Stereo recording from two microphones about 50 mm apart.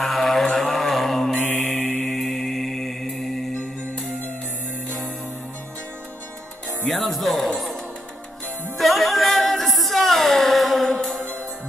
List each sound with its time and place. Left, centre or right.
0.0 s vehicle: centre
0.6 s a sound: centre
1.3 s mantra: centre
1.7 s mantra: centre
6.9 s speech: centre
8.7 s music: centre